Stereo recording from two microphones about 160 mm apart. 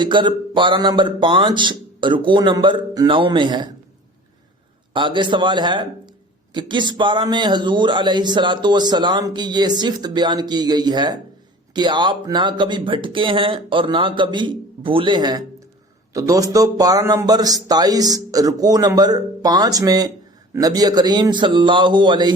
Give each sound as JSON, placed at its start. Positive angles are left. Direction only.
{"t": 0.0, "sound": "speech", "side_deg": -30}
{"t": 4.9, "sound": "speech", "side_deg": -30}